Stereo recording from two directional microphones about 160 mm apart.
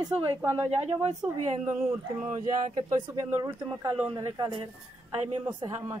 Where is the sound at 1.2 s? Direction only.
20° right (ahead or behind).